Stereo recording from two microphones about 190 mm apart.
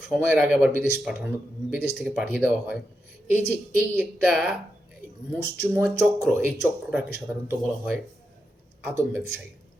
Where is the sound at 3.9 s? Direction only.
10° right (ahead or behind).